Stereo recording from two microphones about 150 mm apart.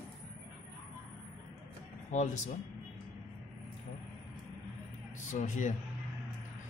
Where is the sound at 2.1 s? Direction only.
50° left (ahead or behind).